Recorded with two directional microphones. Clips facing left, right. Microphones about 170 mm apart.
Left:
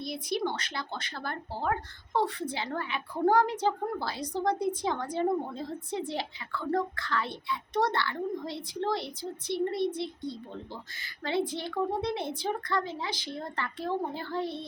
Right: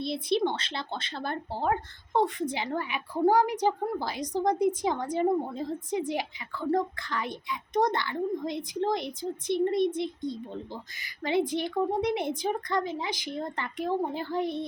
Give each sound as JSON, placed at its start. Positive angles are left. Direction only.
{"t": 0.0, "sound": "a woman's voice", "side_deg": -25}